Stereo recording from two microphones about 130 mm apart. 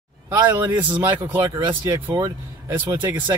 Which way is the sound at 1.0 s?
15° right (ahead or behind).